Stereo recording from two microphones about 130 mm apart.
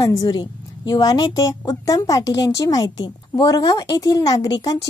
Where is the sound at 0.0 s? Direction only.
30° left (ahead or behind).